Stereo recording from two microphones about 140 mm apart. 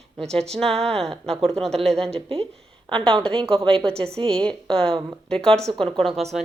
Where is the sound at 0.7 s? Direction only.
45° right (ahead or behind).